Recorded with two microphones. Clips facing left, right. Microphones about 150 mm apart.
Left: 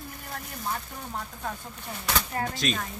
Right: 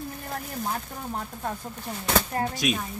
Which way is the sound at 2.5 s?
10° right (ahead or behind).